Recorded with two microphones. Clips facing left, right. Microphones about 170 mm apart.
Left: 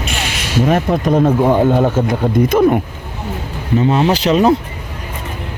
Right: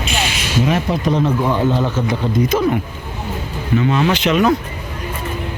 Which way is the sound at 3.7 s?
35° left (ahead or behind).